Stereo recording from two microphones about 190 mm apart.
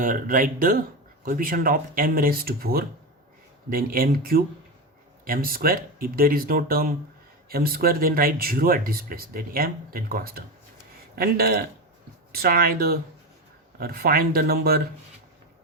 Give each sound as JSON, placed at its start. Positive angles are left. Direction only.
{"t": 0.0, "sound": "speech", "side_deg": -45}